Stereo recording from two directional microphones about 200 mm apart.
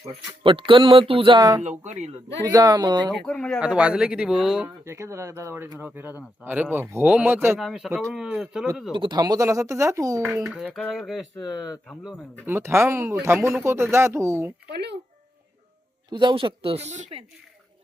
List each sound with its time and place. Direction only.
0.0 s speech: 25° right (ahead or behind)
1.8 s speech: 35° right (ahead or behind)
2.5 s speech: 20° right (ahead or behind)
3.1 s speech: 5° left (ahead or behind)
3.6 s speech: 5° right (ahead or behind)
8.9 s speech: 25° right (ahead or behind)
10.2 s speech: 5° right (ahead or behind)
11.3 s speech: 15° left (ahead or behind)
11.9 s speech: 5° left (ahead or behind)
12.5 s speech: 10° right (ahead or behind)
14.7 s speech: 55° right (ahead or behind)
16.0 s speech: 25° right (ahead or behind)